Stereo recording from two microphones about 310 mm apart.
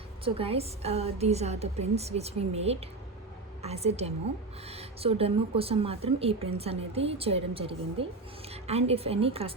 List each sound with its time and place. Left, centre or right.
0.3 s a woman's voice: centre